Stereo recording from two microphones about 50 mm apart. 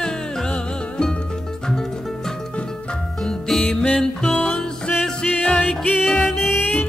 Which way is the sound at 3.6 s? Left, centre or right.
Left.